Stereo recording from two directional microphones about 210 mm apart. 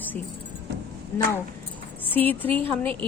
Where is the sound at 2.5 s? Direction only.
25° right (ahead or behind).